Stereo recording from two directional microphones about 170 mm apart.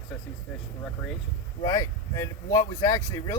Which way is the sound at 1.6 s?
20° left (ahead or behind).